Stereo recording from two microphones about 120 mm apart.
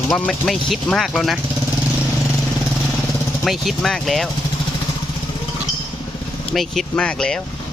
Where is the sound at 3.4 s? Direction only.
Centre (ahead or behind).